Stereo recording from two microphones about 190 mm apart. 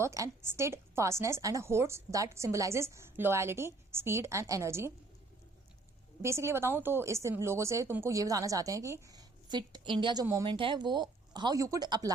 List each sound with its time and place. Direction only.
0.0 s a woman's voice: 15° right (ahead or behind)
6.2 s a woman's voice: 15° right (ahead or behind)